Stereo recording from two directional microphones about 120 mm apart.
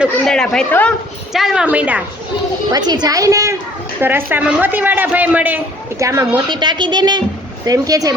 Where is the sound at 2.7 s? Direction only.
35° right (ahead or behind); by 5.6 s 15° right (ahead or behind).